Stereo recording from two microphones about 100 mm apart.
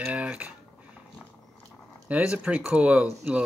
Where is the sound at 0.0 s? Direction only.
15° right (ahead or behind).